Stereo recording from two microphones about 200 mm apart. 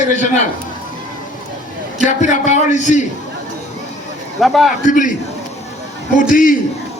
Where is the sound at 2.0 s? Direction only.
35° left (ahead or behind).